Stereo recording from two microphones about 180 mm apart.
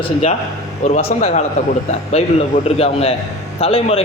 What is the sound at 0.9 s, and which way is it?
A man's voice, 40° left (ahead or behind).